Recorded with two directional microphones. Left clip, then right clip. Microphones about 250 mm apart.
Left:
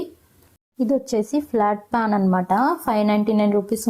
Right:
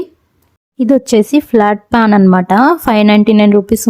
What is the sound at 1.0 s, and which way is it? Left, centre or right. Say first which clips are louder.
Speech: right 12 dB; right.